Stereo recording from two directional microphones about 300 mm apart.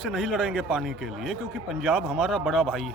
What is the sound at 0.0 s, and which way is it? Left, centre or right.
Speech, centre.